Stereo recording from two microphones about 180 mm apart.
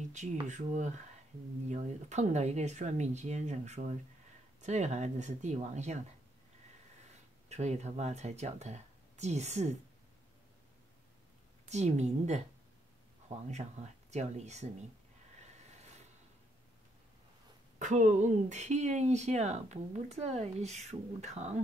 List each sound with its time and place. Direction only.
0.1 s speech: 40° right (ahead or behind)
7.4 s speech: 40° right (ahead or behind)
11.7 s speech: 40° right (ahead or behind)
17.7 s speech: 40° right (ahead or behind)